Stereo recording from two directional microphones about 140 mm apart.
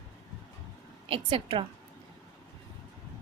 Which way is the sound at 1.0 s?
40° right (ahead or behind).